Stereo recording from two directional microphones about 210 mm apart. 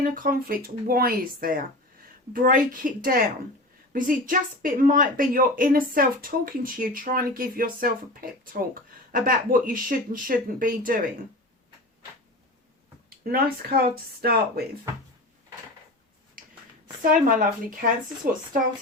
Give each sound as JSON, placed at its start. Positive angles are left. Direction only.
{"t": 0.0, "sound": "a woman's voice", "side_deg": -40}
{"t": 13.2, "sound": "speech", "side_deg": -45}
{"t": 17.0, "sound": "a woman's voice", "side_deg": -40}